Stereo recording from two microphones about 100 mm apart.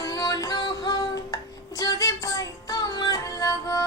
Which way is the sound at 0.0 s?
35° left (ahead or behind).